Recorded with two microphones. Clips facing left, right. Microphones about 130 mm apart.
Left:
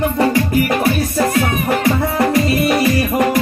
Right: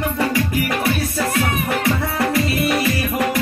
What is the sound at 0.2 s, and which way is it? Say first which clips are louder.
Music: left 5 dB; 40° left (ahead or behind).